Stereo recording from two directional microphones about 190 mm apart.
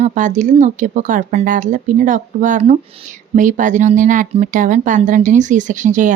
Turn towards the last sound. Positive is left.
turn(degrees=-40)  # may be behind; listen again after turning